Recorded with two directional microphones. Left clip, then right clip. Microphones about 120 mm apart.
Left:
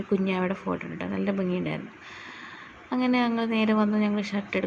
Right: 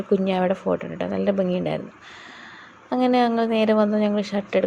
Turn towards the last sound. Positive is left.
turn(degrees=-35)  # may be behind; listen again after turning